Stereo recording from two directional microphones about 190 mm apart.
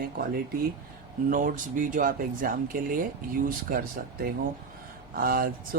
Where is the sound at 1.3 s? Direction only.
45° right (ahead or behind).